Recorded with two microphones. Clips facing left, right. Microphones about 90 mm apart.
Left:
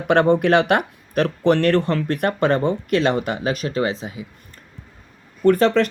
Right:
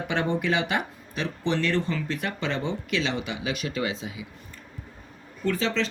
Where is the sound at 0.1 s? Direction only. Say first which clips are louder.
Left 11 dB; 55° left (ahead or behind).